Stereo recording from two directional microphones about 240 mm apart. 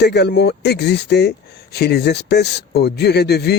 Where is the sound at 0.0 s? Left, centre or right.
Left.